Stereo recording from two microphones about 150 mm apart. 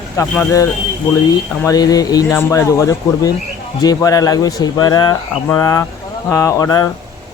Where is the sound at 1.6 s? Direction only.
25° left (ahead or behind).